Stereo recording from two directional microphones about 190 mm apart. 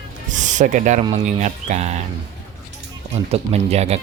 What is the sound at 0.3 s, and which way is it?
Speech, 40° right (ahead or behind).